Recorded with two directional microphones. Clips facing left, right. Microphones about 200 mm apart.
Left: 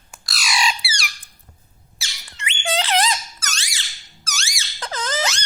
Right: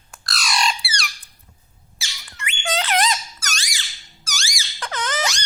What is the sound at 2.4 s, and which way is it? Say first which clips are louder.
Squeak: left 1 dB; 25° left (ahead or behind).